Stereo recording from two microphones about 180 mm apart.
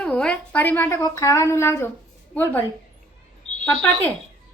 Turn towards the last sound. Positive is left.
turn(degrees=5)  # may be behind; listen again after turning